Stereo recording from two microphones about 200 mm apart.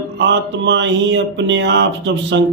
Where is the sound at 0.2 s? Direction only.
60° right (ahead or behind).